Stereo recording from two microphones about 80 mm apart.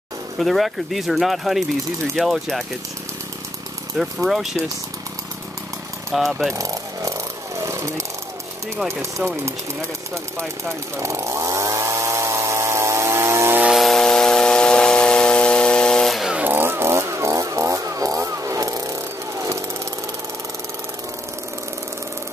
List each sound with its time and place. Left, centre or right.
0.4 s speech: centre
4.3 s speech: centre
6.1 s speech: centre
6.5 s jackhammer: right
9.4 s jackhammer: right
13.7 s power tool: centre
16.4 s a sound: right